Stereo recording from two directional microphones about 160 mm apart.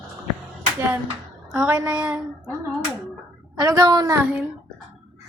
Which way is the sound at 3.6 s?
25° right (ahead or behind).